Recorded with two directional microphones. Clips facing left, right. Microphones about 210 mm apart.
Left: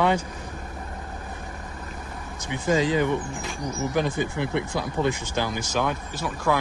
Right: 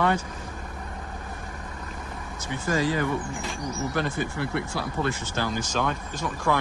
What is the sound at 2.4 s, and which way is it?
Speech, 20° left (ahead or behind).